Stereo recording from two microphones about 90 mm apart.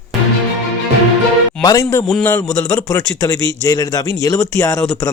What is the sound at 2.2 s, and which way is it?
A man's voice, 25° left (ahead or behind).